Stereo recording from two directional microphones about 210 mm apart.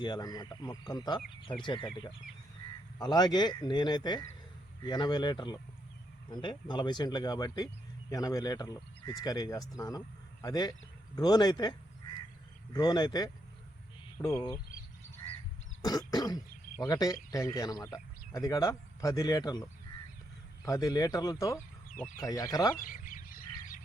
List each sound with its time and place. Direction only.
0.0 s speech: 20° left (ahead or behind)
3.0 s a man's voice: 20° left (ahead or behind)
12.7 s speech: 20° left (ahead or behind)
14.2 s speech: 10° left (ahead or behind)
15.8 s throat clearing: 15° left (ahead or behind)
16.9 s speech: 15° left (ahead or behind)
20.7 s speech: 15° left (ahead or behind)
21.9 s speech: centre (ahead or behind)
22.3 s speech: 15° left (ahead or behind)
22.7 s duck: 40° left (ahead or behind)